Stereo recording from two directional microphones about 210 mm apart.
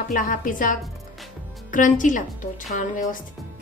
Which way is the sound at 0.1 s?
40° left (ahead or behind).